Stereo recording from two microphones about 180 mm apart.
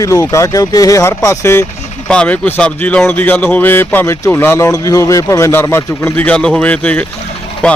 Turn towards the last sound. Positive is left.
turn(degrees=5)  # may be behind; listen again after turning